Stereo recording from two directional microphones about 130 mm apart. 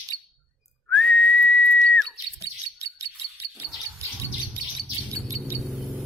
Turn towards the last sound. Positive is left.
turn(degrees=-20)  # may be behind; listen again after turning